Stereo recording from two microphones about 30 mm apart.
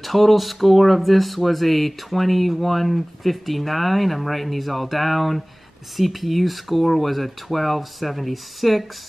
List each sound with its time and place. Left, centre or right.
0.0 s speech: centre